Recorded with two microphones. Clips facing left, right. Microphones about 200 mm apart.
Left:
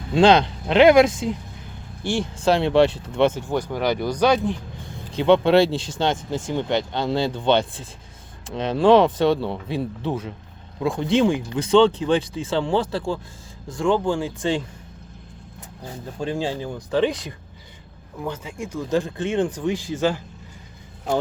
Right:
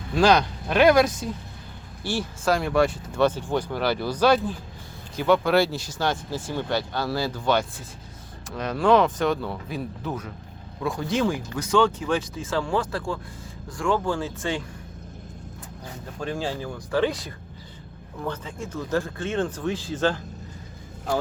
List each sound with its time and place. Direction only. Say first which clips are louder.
0.1 s speech: left 4 dB; 25° left (ahead or behind)
15.9 s speech: left 4 dB; 20° left (ahead or behind)